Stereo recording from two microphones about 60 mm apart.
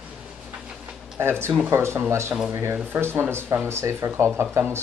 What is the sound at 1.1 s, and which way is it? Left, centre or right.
Speech, right.